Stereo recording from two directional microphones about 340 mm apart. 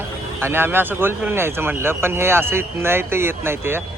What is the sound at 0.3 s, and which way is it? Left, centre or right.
A man's voice, centre.